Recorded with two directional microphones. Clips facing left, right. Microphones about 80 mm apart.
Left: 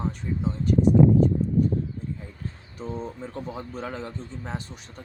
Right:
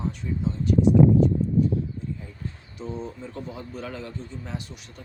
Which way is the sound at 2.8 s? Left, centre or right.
Left.